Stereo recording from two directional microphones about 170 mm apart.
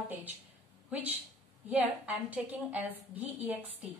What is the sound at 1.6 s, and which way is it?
A woman's voice, 10° right (ahead or behind).